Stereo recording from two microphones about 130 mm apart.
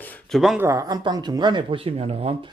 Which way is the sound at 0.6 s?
25° right (ahead or behind).